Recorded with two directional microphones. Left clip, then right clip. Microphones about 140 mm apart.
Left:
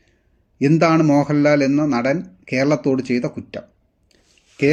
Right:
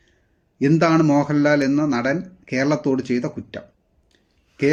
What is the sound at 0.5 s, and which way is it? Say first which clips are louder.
Speech: left 2 dB; 30° left (ahead or behind).